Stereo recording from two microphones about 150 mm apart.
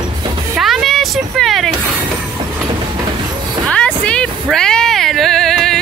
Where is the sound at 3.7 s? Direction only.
5° left (ahead or behind).